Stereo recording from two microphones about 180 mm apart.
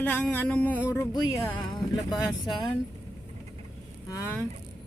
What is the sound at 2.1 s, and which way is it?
Speech, 25° left (ahead or behind).